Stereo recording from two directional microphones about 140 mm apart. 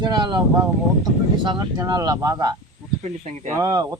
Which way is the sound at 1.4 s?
30° right (ahead or behind).